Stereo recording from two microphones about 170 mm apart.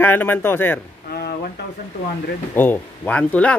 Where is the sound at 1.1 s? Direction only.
65° left (ahead or behind).